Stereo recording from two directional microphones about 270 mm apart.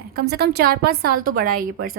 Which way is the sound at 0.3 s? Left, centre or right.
Right.